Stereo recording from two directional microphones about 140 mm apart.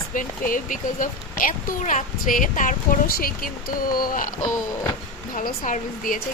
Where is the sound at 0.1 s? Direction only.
70° left (ahead or behind).